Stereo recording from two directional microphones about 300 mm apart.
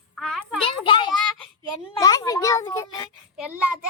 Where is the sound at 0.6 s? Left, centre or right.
Centre.